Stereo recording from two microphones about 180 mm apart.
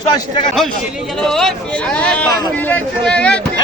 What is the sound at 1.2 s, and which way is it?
Speech, 5° left (ahead or behind).